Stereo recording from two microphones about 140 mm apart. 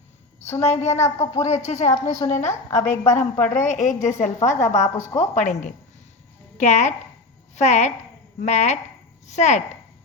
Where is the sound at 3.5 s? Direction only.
60° left (ahead or behind).